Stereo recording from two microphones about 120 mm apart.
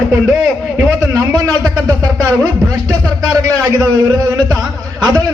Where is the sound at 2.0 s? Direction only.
30° right (ahead or behind).